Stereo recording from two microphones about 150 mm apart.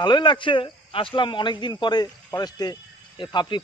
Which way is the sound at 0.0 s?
30° left (ahead or behind).